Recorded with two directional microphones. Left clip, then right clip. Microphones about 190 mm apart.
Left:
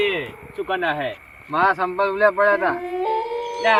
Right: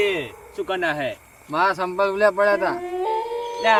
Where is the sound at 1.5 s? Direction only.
20° right (ahead or behind).